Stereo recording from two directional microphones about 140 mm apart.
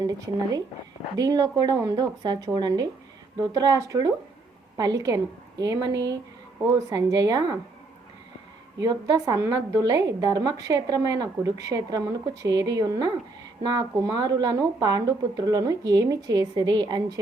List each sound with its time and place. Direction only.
0.0 s a woman's voice: 25° right (ahead or behind)
8.8 s a woman's voice: 25° right (ahead or behind)